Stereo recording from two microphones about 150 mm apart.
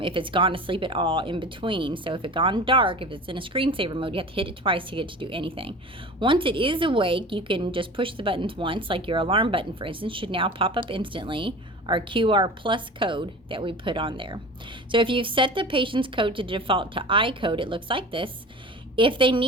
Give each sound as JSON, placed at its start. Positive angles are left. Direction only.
{"t": 0.0, "sound": "a woman's voice", "side_deg": -35}